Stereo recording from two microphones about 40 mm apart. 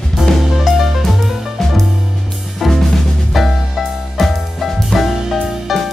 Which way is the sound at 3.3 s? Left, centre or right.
Centre.